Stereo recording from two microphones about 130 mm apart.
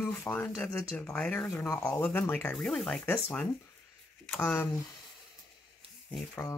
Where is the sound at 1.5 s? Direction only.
20° left (ahead or behind).